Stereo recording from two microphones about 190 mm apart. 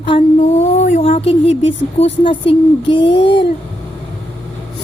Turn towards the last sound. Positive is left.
turn(degrees=25)  # may be behind; listen again after turning